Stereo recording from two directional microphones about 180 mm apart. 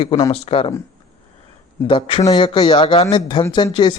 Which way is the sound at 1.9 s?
30° left (ahead or behind).